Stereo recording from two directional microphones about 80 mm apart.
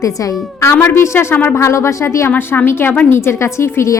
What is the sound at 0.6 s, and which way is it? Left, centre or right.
A woman's voice, left.